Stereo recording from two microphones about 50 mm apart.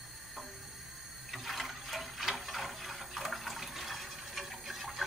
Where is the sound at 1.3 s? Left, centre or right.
Centre.